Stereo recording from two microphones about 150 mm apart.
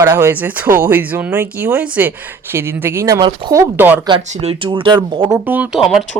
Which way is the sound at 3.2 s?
30° right (ahead or behind).